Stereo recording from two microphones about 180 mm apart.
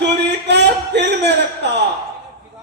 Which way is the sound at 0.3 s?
70° right (ahead or behind).